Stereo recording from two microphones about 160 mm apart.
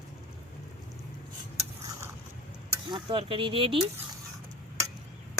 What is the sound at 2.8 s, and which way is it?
Speech, 30° right (ahead or behind).